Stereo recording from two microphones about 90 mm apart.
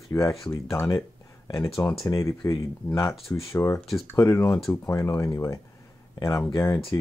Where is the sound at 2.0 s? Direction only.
35° left (ahead or behind).